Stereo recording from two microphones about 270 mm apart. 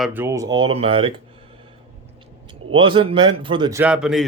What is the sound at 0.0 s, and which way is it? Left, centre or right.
Speech, centre.